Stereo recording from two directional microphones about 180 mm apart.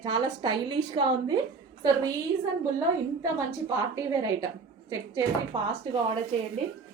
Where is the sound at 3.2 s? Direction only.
20° right (ahead or behind).